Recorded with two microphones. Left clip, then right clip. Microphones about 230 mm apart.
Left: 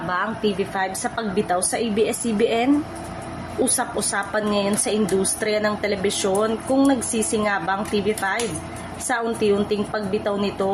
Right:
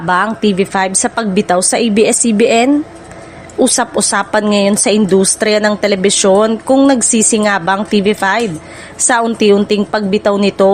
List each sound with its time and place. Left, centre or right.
0.1 s a woman's voice: right